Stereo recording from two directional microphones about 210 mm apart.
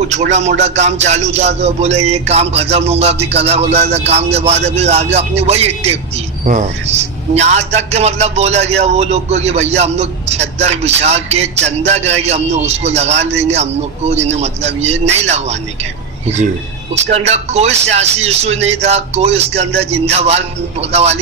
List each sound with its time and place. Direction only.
0.1 s a man's voice: 35° right (ahead or behind)
3.3 s music: 30° right (ahead or behind)
3.9 s a man's voice: 30° right (ahead or behind)
17.1 s a man's voice: 30° right (ahead or behind)